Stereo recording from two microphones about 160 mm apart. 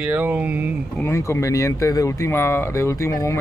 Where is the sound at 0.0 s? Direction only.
10° right (ahead or behind).